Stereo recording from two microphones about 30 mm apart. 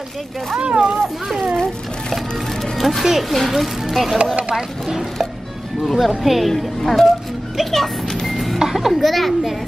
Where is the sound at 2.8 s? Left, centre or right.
Centre.